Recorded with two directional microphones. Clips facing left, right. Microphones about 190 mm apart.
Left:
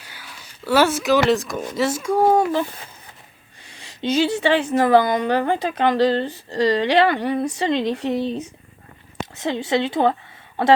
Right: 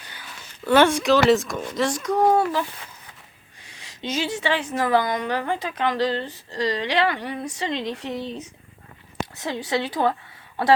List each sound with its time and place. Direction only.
0.0 s a sound: 5° left (ahead or behind)
1.7 s speech: 5° left (ahead or behind)
2.4 s a woman's voice: 25° left (ahead or behind)